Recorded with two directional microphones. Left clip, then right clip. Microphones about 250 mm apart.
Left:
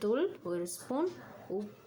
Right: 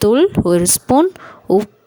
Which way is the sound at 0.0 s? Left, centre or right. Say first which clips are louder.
Right 19 dB; right.